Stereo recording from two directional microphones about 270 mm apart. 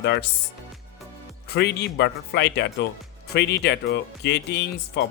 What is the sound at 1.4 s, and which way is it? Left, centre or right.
Speech, left.